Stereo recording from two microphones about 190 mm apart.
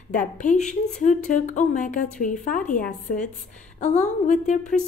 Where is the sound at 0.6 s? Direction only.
5° left (ahead or behind).